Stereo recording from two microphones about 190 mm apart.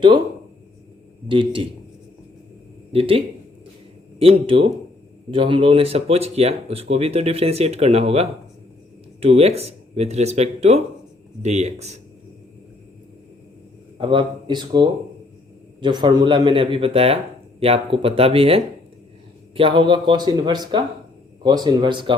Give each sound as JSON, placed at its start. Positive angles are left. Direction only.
{"t": 1.3, "sound": "speech", "side_deg": -25}
{"t": 2.9, "sound": "speech", "side_deg": -30}
{"t": 4.2, "sound": "speech", "side_deg": -30}
{"t": 14.0, "sound": "speech", "side_deg": -25}